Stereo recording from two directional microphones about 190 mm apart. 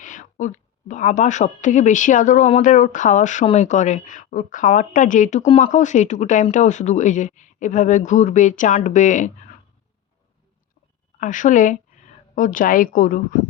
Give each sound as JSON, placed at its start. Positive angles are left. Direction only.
{"t": 0.0, "sound": "a woman's voice", "side_deg": 40}
{"t": 11.2, "sound": "a woman's voice", "side_deg": 40}